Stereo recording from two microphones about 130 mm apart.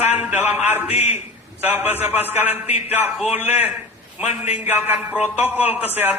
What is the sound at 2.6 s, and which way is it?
Speech, 55° left (ahead or behind).